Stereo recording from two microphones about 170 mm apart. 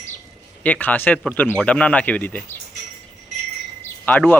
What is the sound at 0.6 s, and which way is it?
A man's voice, 10° left (ahead or behind).